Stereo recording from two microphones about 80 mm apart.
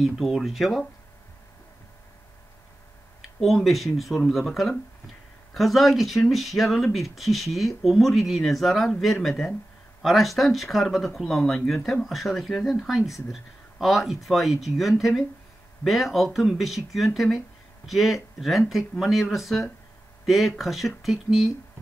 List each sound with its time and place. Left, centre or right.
0.0 s speech: centre
3.2 s speech: centre